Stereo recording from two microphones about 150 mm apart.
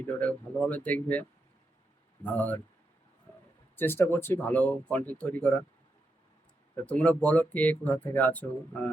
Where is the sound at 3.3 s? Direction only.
10° left (ahead or behind).